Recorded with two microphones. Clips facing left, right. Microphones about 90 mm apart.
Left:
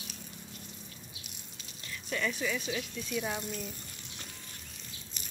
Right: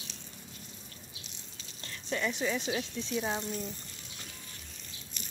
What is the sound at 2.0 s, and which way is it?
Speech, 25° right (ahead or behind).